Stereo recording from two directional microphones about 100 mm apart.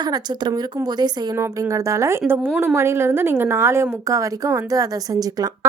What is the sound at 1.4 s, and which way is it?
A woman's voice, 30° right (ahead or behind).